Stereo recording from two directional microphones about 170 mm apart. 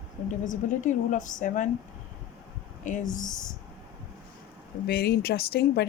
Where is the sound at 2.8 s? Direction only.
50° left (ahead or behind).